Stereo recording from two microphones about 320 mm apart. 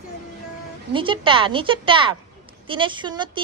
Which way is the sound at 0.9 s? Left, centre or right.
Centre.